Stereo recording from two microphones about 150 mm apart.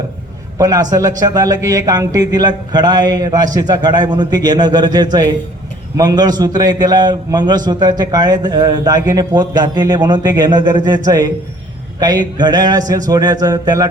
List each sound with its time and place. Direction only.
0.6 s a man's voice: 25° right (ahead or behind)